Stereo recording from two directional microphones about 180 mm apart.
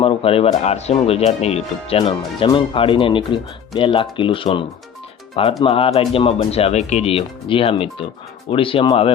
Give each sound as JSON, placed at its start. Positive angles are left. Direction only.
{"t": 0.0, "sound": "speech", "side_deg": 30}